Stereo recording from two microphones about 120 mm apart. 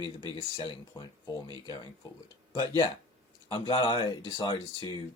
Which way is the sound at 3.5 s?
40° left (ahead or behind).